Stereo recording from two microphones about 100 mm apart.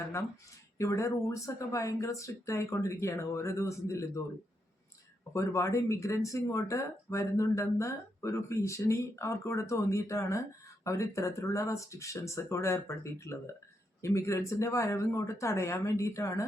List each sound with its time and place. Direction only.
0.8 s speech: 30° left (ahead or behind)
5.3 s speech: 30° left (ahead or behind)